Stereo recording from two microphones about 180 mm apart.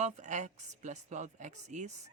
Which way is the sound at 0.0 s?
40° right (ahead or behind).